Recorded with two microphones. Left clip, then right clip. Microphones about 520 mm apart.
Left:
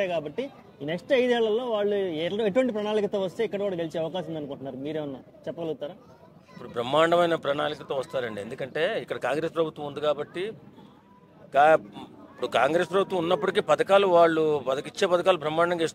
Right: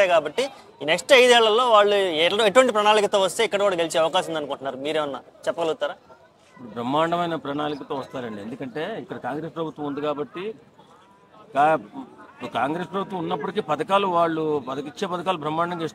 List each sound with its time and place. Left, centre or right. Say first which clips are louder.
0.0 s speech: right 9 dB; right
6.7 s a man's voice: left 1 dB; left
11.5 s a man's voice: even; left